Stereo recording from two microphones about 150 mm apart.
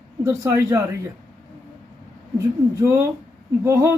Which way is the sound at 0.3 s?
20° right (ahead or behind).